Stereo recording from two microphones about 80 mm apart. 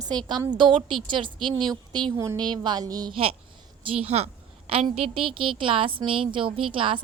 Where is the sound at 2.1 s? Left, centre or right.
Right.